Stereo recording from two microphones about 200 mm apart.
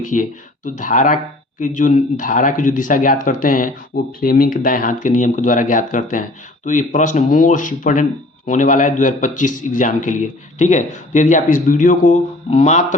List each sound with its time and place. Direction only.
0.0 s speech: 40° left (ahead or behind)